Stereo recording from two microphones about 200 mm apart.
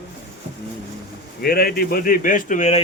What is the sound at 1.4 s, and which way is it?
Speech, 50° left (ahead or behind).